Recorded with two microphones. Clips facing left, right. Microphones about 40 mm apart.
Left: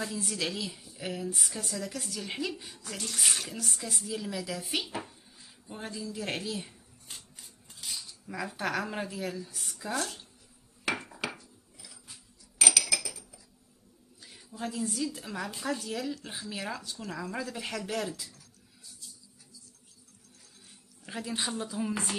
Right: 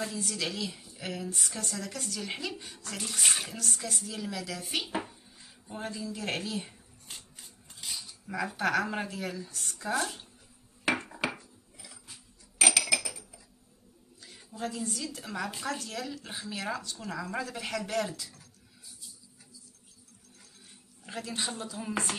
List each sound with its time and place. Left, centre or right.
0.0 s speech: centre
2.5 s a woman's voice: centre
3.5 s speech: centre
4.8 s speech: centre
5.9 s scissors: centre
8.8 s a woman's voice: centre
10.9 s dishes: centre
12.5 s cutlery: right
14.7 s a woman's voice: centre
21.1 s speech: centre